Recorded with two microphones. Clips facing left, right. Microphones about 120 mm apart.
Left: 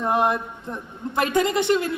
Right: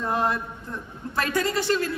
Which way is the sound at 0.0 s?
20° left (ahead or behind).